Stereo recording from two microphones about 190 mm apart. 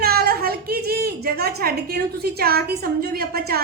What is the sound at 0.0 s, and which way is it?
A woman's voice, 55° right (ahead or behind).